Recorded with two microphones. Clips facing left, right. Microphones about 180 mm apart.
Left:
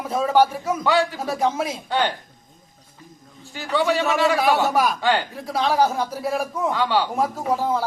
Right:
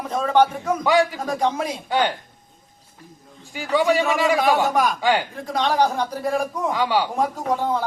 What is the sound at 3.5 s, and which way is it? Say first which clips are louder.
Speech: right 2 dB; 10° right (ahead or behind).